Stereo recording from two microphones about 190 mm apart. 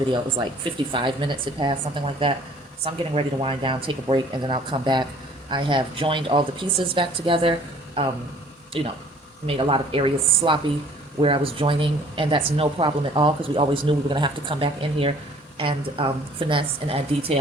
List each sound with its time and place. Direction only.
0.1 s speech: 25° right (ahead or behind)